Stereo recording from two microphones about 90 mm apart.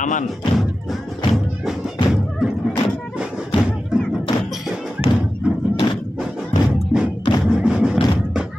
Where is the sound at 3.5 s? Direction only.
65° left (ahead or behind).